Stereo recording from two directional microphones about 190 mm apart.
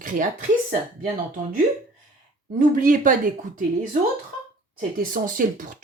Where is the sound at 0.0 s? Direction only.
45° right (ahead or behind).